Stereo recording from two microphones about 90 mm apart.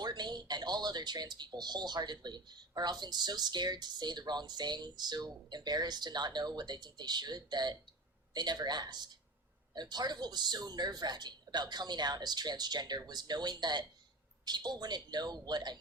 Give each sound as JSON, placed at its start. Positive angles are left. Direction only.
{"t": 0.0, "sound": "speech", "side_deg": -50}